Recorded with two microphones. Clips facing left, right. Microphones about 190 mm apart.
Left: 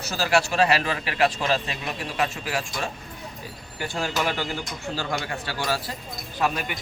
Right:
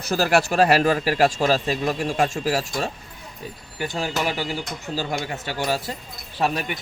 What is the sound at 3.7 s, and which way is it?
A man's voice, 20° right (ahead or behind).